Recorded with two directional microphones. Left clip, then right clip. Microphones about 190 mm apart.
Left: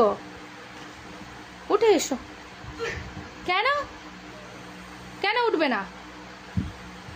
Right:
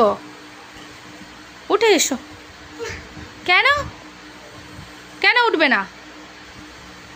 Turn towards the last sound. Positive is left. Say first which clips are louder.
# right 8 dB
turn(degrees=-15)  # may be behind; listen again after turning